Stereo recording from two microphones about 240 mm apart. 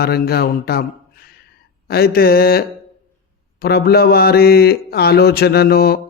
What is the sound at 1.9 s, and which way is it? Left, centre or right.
Speech, left.